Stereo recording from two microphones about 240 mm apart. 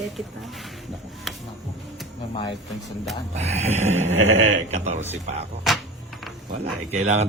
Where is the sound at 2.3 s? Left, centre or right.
Centre.